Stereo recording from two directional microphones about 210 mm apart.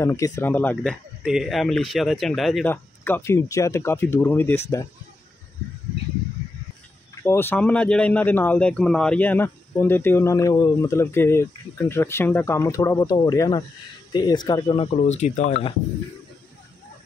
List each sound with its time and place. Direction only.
0.0 s a man's voice: 15° left (ahead or behind)
7.2 s a man's voice: 10° left (ahead or behind); by 15.7 s 35° left (ahead or behind)